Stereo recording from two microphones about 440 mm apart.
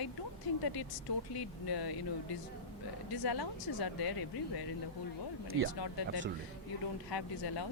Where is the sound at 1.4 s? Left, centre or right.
Left.